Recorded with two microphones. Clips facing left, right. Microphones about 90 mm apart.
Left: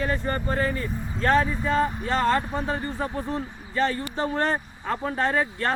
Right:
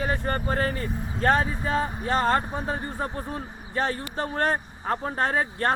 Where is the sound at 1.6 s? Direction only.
25° right (ahead or behind).